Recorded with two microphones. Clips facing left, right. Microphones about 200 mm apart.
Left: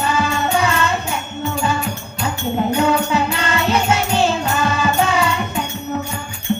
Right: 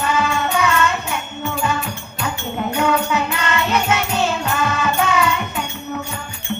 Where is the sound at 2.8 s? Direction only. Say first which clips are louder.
Right 1 dB; 30° left (ahead or behind).